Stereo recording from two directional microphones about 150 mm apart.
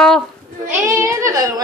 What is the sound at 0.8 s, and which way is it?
Speech, 20° right (ahead or behind).